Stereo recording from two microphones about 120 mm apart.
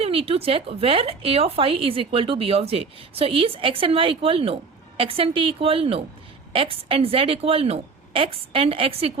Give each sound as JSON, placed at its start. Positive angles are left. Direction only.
{"t": 0.0, "sound": "speech", "side_deg": -55}